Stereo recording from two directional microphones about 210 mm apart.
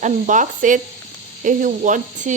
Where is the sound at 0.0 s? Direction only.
35° right (ahead or behind).